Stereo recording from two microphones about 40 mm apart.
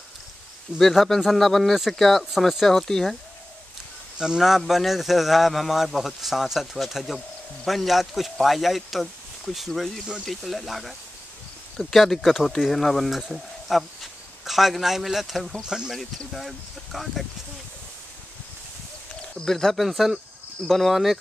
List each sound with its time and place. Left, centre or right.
0.7 s a man's voice: centre
4.4 s a man's voice: centre
15.6 s speech: centre
16.3 s a man's voice: centre
19.3 s speech: centre
19.8 s a man's voice: centre